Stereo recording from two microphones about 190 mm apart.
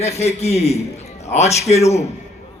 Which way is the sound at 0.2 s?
35° left (ahead or behind).